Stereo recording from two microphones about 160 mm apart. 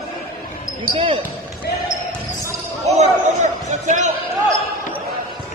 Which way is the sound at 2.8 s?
45° right (ahead or behind).